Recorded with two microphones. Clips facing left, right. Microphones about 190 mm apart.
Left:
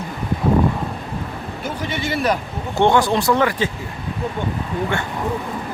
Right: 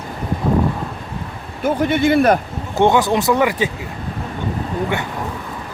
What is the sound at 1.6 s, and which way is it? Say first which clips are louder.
Speech: right 11 dB; 55° right (ahead or behind).